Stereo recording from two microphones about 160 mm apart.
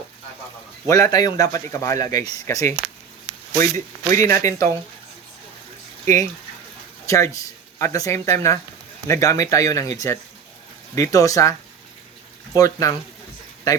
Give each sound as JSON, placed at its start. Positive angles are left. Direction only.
{"t": 0.9, "sound": "speech", "side_deg": 20}
{"t": 7.1, "sound": "speech", "side_deg": 20}
{"t": 12.5, "sound": "speech", "side_deg": 20}